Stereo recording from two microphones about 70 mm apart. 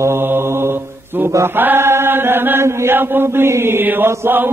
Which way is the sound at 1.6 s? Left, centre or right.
Right.